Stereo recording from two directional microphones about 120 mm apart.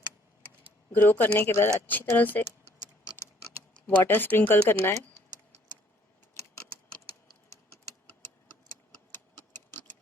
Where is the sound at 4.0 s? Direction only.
15° left (ahead or behind).